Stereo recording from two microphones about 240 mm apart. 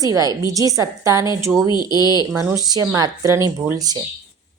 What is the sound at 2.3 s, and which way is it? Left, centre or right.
Speech, centre.